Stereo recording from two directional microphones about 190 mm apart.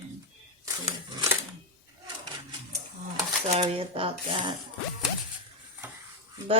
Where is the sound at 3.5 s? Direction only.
30° right (ahead or behind).